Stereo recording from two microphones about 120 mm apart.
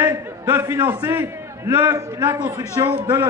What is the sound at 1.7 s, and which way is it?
A man's voice, 35° right (ahead or behind).